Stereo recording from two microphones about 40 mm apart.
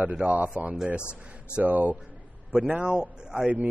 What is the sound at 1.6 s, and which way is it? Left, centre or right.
A man's voice, right.